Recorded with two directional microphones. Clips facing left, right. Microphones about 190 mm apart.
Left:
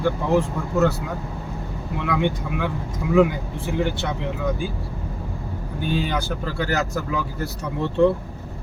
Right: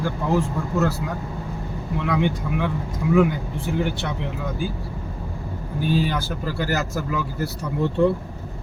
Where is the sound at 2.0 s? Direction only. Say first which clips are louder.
Even; centre (ahead or behind).